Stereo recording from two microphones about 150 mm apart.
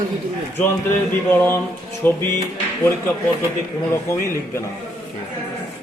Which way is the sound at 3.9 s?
20° left (ahead or behind).